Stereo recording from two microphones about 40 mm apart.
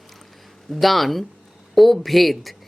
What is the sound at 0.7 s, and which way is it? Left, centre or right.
Speech, centre.